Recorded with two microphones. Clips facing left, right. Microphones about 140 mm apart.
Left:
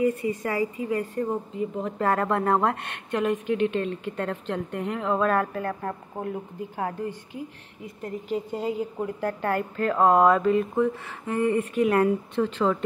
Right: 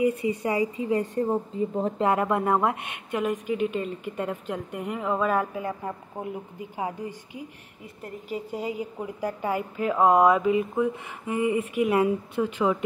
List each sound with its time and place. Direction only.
0.0 s a woman's voice: 15° right (ahead or behind); by 2.0 s 30° right (ahead or behind)
2.0 s a woman's voice: 15° right (ahead or behind)